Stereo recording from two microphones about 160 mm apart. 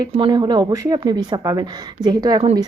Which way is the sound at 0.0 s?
30° right (ahead or behind).